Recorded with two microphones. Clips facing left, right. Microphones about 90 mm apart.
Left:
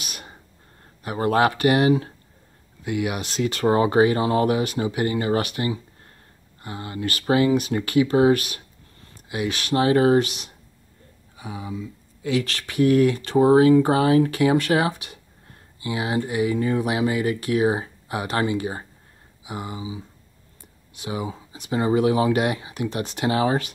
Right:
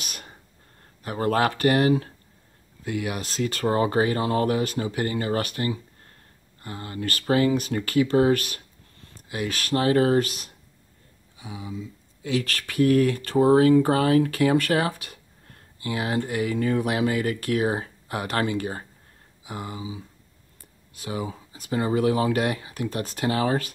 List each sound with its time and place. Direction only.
0.0 s whispering: 5° left (ahead or behind)
1.0 s speech: 15° left (ahead or behind)
3.2 s speech: 40° right (ahead or behind)
3.5 s speech: 20° left (ahead or behind)
9.8 s speech: 20° left (ahead or behind)
10.2 s speech: 40° right (ahead or behind)
11.3 s speech: 40° left (ahead or behind)
12.2 s speech: 35° right (ahead or behind)
12.8 s speech: 20° left (ahead or behind)
21.0 s speech: 15° left (ahead or behind)